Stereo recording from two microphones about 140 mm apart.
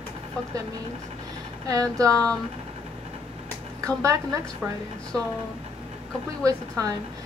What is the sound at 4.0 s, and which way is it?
Speech, 25° right (ahead or behind).